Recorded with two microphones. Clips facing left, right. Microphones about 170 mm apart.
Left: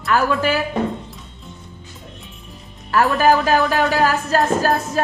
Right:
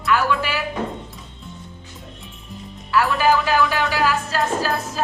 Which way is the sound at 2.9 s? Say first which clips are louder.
Left 3 dB; 45° left (ahead or behind).